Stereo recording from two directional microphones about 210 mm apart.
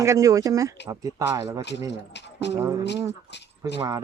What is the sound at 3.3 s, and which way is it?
Keys jangling, 55° left (ahead or behind).